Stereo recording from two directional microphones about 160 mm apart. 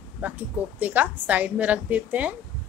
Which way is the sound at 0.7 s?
10° right (ahead or behind).